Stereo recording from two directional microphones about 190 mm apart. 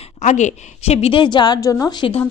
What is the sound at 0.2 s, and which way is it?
A woman's voice, 40° left (ahead or behind).